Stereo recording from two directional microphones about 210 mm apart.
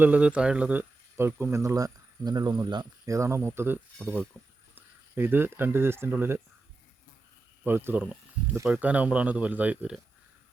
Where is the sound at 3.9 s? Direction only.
5° left (ahead or behind).